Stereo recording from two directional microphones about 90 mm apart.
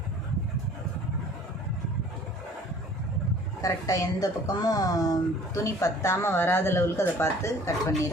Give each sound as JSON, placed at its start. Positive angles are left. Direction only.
{"t": 3.6, "sound": "a woman's voice", "side_deg": 40}